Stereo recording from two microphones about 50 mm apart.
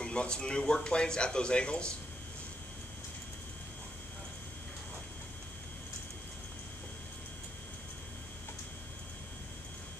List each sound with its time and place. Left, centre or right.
0.0 s speech: centre